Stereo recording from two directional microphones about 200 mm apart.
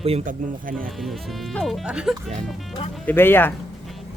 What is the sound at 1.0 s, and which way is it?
Speech, centre (ahead or behind).